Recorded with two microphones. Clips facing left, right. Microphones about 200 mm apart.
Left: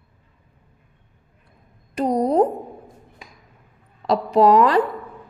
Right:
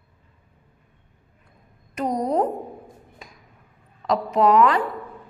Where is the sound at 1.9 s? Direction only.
30° left (ahead or behind).